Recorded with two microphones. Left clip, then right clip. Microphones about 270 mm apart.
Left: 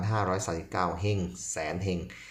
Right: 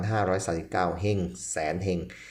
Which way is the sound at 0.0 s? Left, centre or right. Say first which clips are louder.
Right 3 dB; centre.